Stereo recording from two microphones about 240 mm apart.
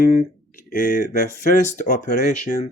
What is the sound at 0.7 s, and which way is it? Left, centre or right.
Speech, left.